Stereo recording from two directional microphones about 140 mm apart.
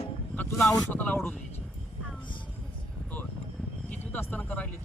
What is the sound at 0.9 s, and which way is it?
Speech, 10° left (ahead or behind).